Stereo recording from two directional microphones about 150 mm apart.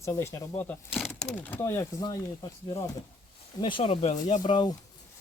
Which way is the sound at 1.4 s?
15° left (ahead or behind).